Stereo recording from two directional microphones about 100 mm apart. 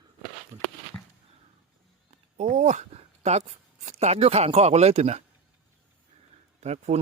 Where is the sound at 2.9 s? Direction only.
90° right.